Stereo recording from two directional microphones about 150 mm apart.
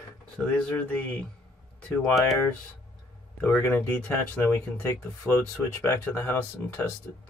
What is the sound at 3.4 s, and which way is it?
Speech, 15° left (ahead or behind).